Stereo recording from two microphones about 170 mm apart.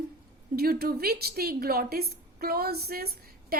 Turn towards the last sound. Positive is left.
turn(degrees=-65)  # may be behind; listen again after turning